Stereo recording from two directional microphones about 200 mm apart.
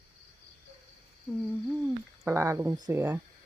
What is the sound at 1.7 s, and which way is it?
Speech, 5° right (ahead or behind).